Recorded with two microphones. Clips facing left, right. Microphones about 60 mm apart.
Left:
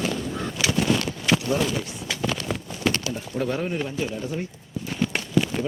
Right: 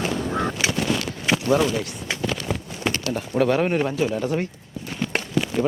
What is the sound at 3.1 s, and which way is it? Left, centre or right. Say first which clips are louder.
Speech: right 7 dB; right.